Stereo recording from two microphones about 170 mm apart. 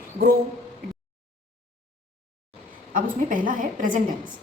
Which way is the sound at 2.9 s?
50° right (ahead or behind).